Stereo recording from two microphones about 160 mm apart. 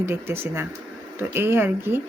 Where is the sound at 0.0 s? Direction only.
15° right (ahead or behind).